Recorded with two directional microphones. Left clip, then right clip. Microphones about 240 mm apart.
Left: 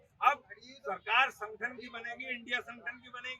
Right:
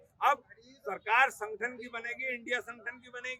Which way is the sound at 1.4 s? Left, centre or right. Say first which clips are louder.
Right 3 dB; right.